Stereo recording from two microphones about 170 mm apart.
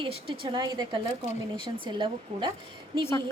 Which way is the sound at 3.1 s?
15° left (ahead or behind).